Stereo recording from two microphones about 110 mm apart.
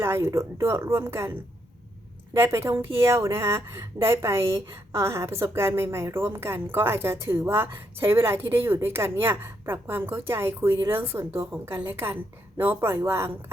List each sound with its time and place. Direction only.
0.0 s speech: 25° right (ahead or behind)
2.4 s speech: 20° right (ahead or behind)